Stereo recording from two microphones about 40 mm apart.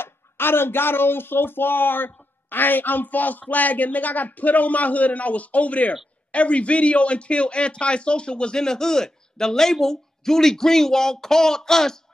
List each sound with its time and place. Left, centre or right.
0.0 s a man's voice: left; by 12.0 s centre